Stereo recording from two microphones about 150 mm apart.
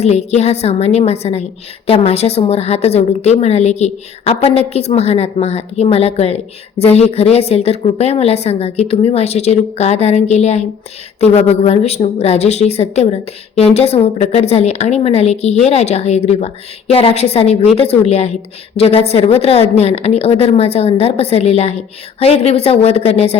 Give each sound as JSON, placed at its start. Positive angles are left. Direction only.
{"t": 0.0, "sound": "a woman's voice", "side_deg": 45}
{"t": 11.6, "sound": "a woman's voice", "side_deg": 45}